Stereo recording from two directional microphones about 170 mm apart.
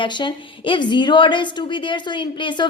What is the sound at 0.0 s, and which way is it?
A woman's voice, 30° left (ahead or behind).